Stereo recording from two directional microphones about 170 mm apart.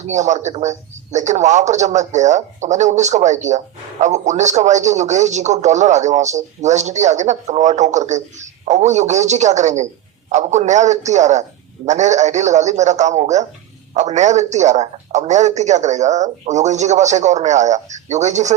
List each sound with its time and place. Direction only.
0.0 s speech: 45° right (ahead or behind)